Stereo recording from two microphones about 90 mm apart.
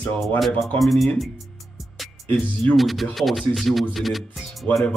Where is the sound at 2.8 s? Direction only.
Centre (ahead or behind).